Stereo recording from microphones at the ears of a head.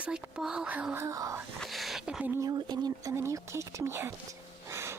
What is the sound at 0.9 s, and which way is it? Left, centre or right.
Speech, right.